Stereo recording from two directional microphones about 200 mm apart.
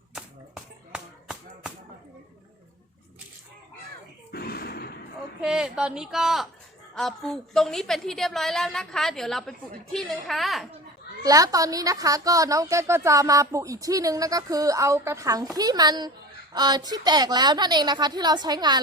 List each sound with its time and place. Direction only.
0.1 s chop: 5° right (ahead or behind)
4.3 s a sound: 50° left (ahead or behind)
5.4 s a woman's voice: 5° right (ahead or behind)
11.2 s a woman's voice: 20° right (ahead or behind)